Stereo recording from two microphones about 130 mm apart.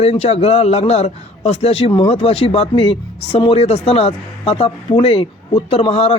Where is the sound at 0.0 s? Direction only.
50° left (ahead or behind).